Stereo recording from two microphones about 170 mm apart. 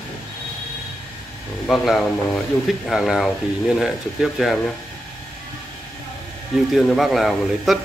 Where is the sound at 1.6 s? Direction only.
Centre (ahead or behind).